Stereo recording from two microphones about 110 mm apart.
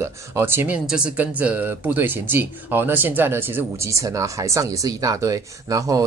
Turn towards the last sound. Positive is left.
turn(degrees=-35)  # may be behind; listen again after turning